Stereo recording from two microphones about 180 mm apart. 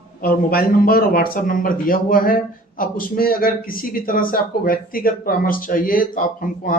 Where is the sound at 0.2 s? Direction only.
55° left (ahead or behind).